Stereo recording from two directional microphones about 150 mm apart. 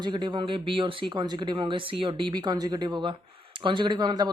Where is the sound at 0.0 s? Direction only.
30° right (ahead or behind).